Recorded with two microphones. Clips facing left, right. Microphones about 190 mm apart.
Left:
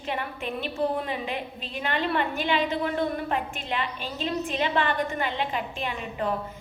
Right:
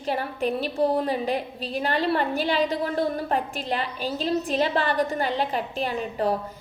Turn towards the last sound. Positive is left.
turn(degrees=-40)  # may be behind; listen again after turning